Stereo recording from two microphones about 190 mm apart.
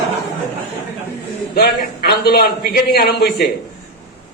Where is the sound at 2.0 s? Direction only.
55° left (ahead or behind).